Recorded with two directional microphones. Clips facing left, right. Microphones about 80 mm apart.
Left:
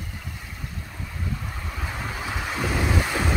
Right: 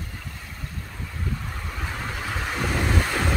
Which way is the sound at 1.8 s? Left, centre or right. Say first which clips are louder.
Even; centre.